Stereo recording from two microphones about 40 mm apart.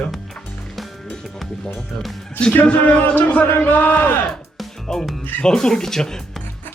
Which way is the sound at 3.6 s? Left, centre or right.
Left.